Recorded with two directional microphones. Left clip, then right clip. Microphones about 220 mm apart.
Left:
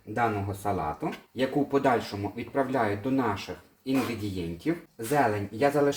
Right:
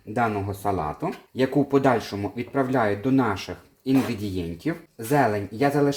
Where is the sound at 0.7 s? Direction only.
50° right (ahead or behind).